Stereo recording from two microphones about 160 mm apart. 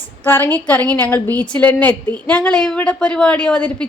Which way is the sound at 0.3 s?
15° left (ahead or behind).